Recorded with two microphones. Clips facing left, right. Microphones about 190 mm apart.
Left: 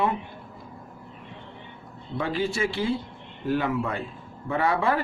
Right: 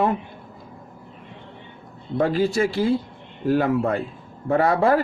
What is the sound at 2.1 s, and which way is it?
Speech, 40° right (ahead or behind).